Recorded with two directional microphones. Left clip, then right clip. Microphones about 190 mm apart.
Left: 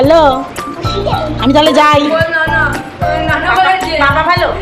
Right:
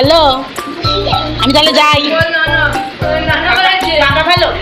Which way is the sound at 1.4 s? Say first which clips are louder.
Left 1 dB; 20° left (ahead or behind).